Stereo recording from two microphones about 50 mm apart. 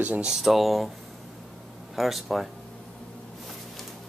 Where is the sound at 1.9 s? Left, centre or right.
Centre.